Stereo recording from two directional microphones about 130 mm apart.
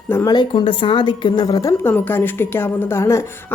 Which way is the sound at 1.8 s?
15° left (ahead or behind).